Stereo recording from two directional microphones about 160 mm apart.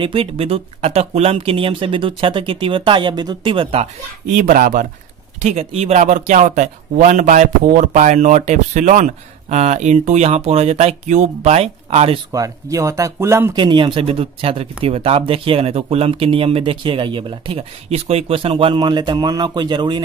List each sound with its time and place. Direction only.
0.0 s speech: 35° right (ahead or behind)
4.4 s speech: 55° right (ahead or behind)
5.4 s speech: 40° right (ahead or behind)
12.3 s speech: 20° right (ahead or behind)
13.6 s speech: 30° right (ahead or behind)